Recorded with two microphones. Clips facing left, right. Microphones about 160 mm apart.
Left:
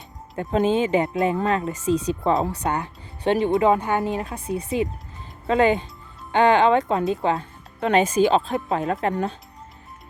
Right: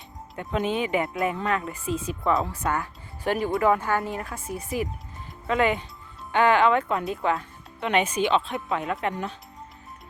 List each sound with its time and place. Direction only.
0.3 s speech: 35° left (ahead or behind)
5.5 s speech: 30° left (ahead or behind)